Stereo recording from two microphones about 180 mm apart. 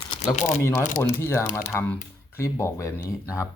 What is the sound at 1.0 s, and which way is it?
Speech, 15° left (ahead or behind).